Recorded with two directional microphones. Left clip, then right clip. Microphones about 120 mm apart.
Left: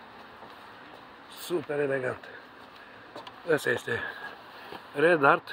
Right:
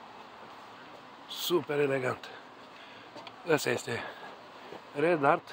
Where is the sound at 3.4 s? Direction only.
40° right (ahead or behind).